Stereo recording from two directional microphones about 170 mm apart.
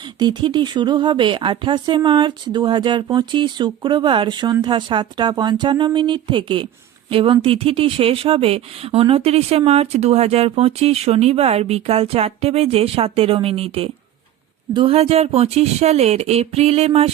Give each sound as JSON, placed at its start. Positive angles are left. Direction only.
{"t": 0.0, "sound": "speech", "side_deg": -25}